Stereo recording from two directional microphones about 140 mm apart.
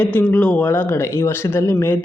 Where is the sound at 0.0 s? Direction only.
10° left (ahead or behind).